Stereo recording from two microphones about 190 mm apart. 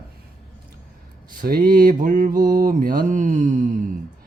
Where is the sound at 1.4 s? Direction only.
50° right (ahead or behind).